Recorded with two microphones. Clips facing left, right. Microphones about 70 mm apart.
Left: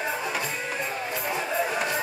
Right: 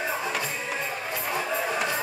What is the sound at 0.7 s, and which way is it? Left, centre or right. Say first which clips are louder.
Music: left 1 dB; centre.